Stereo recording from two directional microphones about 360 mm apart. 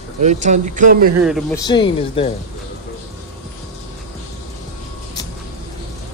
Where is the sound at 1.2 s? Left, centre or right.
Centre.